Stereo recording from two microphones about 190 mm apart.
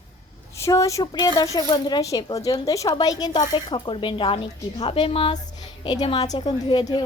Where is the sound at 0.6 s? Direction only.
15° left (ahead or behind).